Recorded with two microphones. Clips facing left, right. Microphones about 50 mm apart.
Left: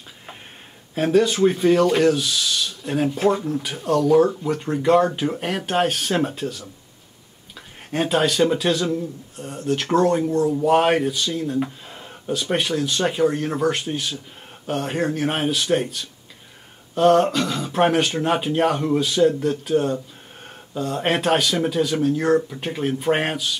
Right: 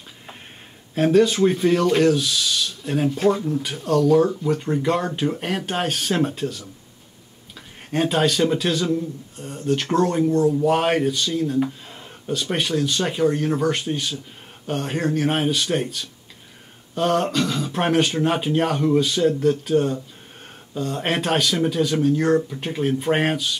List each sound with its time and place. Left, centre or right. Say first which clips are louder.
0.9 s speech: right 1 dB; centre
7.9 s speech: even; centre